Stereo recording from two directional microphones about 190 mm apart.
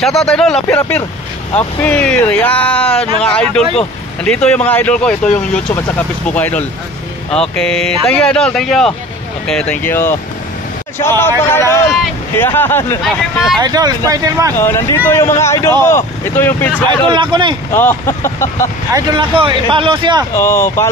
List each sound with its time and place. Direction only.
0.2 s speech: 5° left (ahead or behind)
13.6 s speech: 20° right (ahead or behind)
14.6 s speech: 15° left (ahead or behind)
17.1 s speech: 25° right (ahead or behind)
17.6 s speech: 10° left (ahead or behind)
18.9 s speech: 25° right (ahead or behind)
20.3 s speech: 15° left (ahead or behind)